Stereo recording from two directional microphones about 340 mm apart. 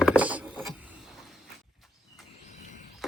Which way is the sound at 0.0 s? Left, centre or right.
Centre.